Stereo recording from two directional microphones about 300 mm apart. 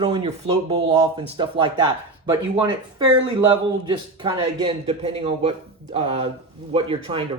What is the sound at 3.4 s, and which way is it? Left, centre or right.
A man's voice, centre.